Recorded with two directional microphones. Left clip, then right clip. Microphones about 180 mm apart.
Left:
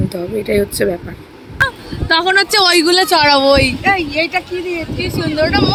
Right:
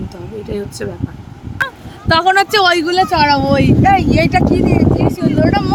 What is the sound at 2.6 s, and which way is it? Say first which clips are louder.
Speech: left 1 dB; centre (ahead or behind).